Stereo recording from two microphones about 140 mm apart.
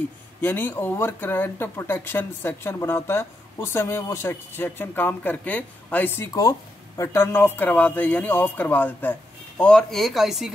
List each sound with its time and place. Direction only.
0.4 s speech: 15° left (ahead or behind); by 10.5 s centre (ahead or behind)